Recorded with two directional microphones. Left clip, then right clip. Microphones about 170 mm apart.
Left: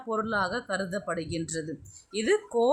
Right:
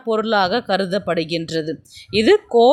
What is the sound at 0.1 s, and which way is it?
Speech, 30° right (ahead or behind).